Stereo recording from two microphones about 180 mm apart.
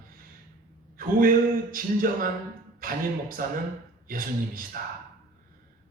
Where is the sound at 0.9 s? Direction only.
50° right (ahead or behind).